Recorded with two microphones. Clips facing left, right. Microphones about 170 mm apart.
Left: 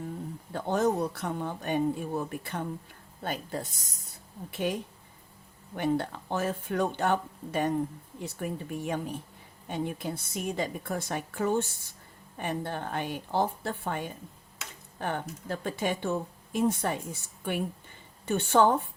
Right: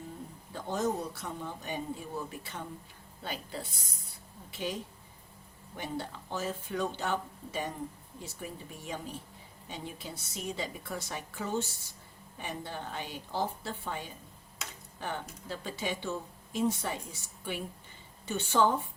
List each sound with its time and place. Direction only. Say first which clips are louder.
0.5 s a woman's voice: left 5 dB; 60° left (ahead or behind); by 4.1 s 45° left (ahead or behind)
4.5 s a woman's voice: left 5 dB; 55° left (ahead or behind)